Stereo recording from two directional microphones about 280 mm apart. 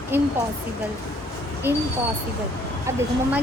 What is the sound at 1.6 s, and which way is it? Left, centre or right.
Speech, centre.